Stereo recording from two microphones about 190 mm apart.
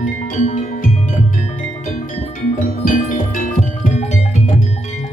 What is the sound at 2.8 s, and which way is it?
Music, 45° left (ahead or behind).